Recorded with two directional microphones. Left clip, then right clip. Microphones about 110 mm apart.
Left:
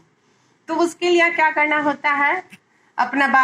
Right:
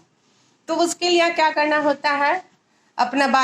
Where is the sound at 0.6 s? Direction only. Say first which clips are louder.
Even; 35° right (ahead or behind).